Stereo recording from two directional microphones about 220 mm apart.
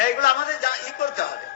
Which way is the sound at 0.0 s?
40° left (ahead or behind).